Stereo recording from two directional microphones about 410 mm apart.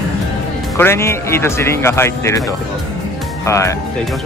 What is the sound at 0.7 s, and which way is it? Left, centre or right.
Speech, centre.